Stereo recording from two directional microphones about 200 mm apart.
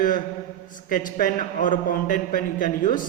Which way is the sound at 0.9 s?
45° left (ahead or behind).